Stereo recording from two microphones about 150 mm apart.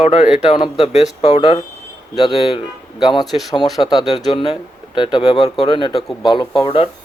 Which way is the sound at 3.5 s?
25° left (ahead or behind).